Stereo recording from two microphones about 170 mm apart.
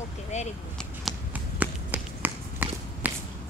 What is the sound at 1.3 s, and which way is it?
Walk, 10° right (ahead or behind).